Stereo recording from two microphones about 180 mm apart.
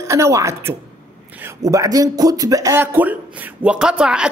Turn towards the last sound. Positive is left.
turn(degrees=-5)  # may be behind; listen again after turning